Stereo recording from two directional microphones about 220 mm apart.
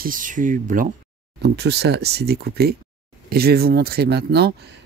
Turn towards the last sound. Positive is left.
turn(degrees=-50)  # may be behind; listen again after turning